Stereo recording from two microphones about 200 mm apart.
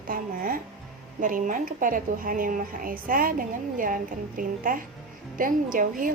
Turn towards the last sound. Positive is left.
turn(degrees=-40)  # may be behind; listen again after turning